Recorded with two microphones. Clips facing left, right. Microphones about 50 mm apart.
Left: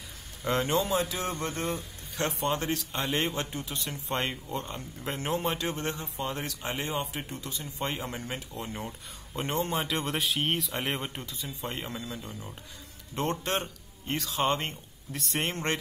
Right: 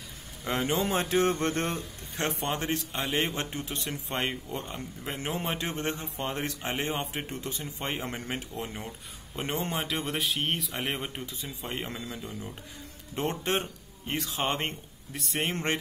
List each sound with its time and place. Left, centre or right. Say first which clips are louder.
0.5 s speech: left 1 dB; centre
0.8 s speech: right 4 dB; right
2.1 s speech: left 1 dB; right
3.3 s speech: even; right
4.1 s speech: left 1 dB; centre
5.7 s speech: even; right
9.3 s speech: left 2 dB; centre
11.7 s speech: right 1 dB; right
13.1 s speech: even; centre
15.1 s speech: even; centre